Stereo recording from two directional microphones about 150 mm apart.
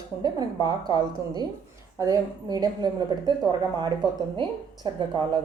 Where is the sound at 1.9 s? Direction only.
25° right (ahead or behind).